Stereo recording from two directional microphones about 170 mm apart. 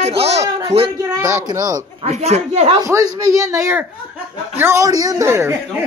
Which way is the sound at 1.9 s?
40° right (ahead or behind).